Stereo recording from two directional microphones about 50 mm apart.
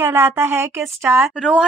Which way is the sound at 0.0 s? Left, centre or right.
Right.